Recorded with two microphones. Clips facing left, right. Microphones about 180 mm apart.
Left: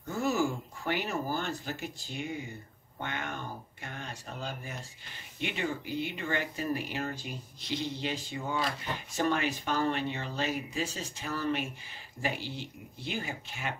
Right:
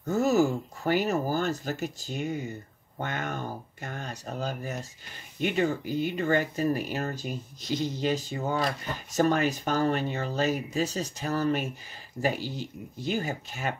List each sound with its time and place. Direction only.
0.0 s speech: 40° right (ahead or behind)